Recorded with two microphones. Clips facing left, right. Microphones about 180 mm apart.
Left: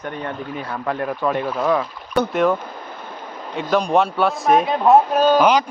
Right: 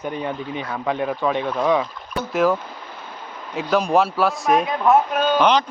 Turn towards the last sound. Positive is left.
turn(degrees=5)  # may be behind; listen again after turning